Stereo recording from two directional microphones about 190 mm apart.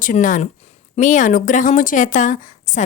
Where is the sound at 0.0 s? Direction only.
45° left (ahead or behind).